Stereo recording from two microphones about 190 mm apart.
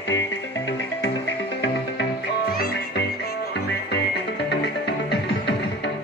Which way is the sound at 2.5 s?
55° left (ahead or behind).